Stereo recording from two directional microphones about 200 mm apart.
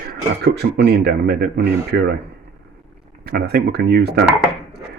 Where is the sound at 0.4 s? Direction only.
55° right (ahead or behind).